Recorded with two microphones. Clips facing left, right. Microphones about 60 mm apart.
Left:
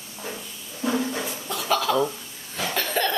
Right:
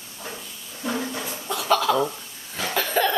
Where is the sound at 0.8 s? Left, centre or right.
Centre.